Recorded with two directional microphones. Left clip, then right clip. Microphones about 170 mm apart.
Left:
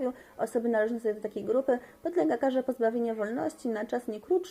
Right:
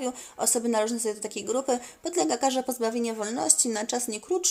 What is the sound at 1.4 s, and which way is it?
Speech, 15° right (ahead or behind).